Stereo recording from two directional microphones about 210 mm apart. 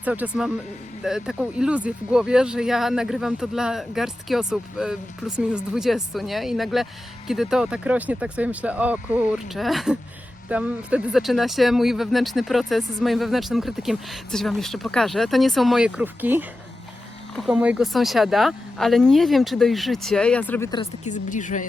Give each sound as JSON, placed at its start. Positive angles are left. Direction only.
{"t": 0.0, "sound": "speech", "side_deg": -5}
{"t": 21.0, "sound": "speech", "side_deg": 35}